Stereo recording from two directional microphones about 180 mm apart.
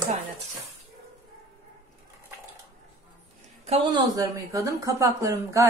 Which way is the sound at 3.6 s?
35° right (ahead or behind).